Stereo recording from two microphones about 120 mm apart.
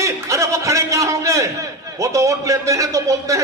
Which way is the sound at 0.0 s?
25° right (ahead or behind).